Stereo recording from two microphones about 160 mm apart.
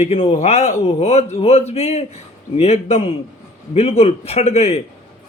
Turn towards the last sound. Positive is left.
turn(degrees=40)  # may be behind; listen again after turning